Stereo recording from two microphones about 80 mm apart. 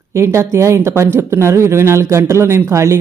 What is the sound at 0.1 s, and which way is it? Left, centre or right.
Speech, right.